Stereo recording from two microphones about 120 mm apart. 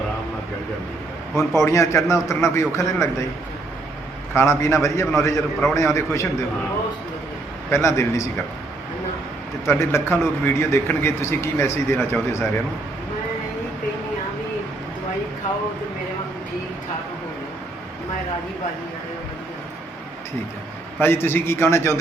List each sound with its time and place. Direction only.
1.6 s a man's voice: 25° left (ahead or behind)
4.4 s a man's voice: 25° left (ahead or behind)
7.7 s a man's voice: 25° left (ahead or behind)
9.6 s a man's voice: 20° left (ahead or behind)
21.0 s a man's voice: 20° left (ahead or behind)